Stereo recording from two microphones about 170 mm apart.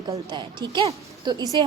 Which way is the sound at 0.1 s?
25° right (ahead or behind).